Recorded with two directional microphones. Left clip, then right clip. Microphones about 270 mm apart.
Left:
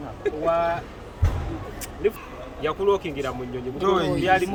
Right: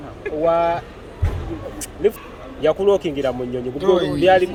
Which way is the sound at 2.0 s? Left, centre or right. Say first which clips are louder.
Right 5 dB; right.